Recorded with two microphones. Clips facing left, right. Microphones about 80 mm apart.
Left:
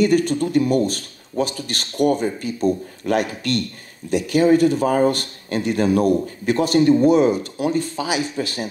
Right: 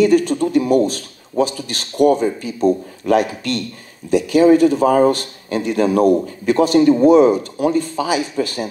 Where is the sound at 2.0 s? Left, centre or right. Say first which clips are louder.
Right 5 dB; right.